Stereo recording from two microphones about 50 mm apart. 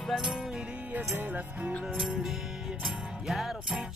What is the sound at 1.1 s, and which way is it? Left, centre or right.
Music, right.